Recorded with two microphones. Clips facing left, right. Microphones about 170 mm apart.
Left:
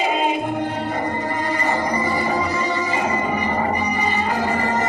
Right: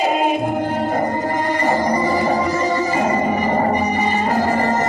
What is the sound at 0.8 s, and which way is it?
Music, 45° right (ahead or behind).